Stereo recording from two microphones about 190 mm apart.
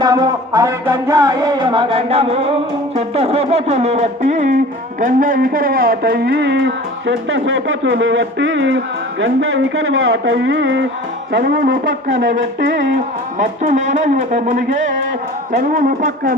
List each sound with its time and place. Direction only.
0.0 s music: 20° right (ahead or behind); by 4.5 s 40° right (ahead or behind)
4.9 s a man's voice: 45° right (ahead or behind); by 8.8 s 80° right
9.2 s speech: 90° right; by 10.8 s 75° right (ahead or behind)
11.3 s a man's voice: 60° right (ahead or behind)
13.4 s music: 40° right (ahead or behind)
15.5 s speech: 45° right (ahead or behind)